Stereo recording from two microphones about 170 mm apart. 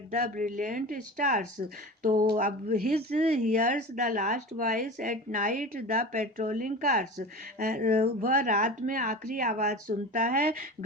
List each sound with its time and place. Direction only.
0.1 s a woman's voice: 45° right (ahead or behind)
2.9 s a woman's voice: 40° right (ahead or behind)